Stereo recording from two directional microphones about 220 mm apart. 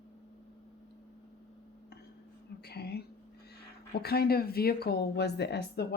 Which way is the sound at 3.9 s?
45° left (ahead or behind).